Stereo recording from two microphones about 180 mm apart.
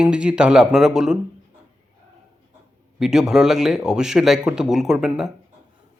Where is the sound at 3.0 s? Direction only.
5° right (ahead or behind).